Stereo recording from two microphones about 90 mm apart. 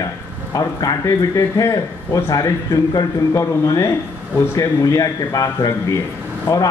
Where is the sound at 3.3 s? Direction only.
30° left (ahead or behind).